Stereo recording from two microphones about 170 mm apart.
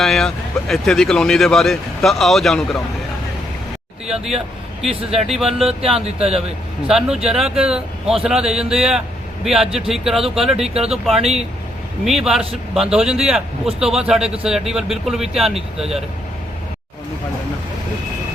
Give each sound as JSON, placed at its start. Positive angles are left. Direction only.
{"t": 0.0, "sound": "speech", "side_deg": 5}
{"t": 4.0, "sound": "speech", "side_deg": -5}
{"t": 5.6, "sound": "speech", "side_deg": -35}
{"t": 6.8, "sound": "speech", "side_deg": -5}